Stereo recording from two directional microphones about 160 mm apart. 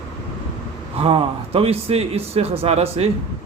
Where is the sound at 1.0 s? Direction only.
35° right (ahead or behind).